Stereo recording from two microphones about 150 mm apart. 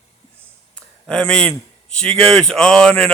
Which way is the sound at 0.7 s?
5° left (ahead or behind).